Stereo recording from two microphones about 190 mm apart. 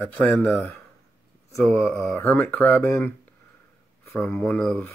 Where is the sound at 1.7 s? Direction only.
10° left (ahead or behind).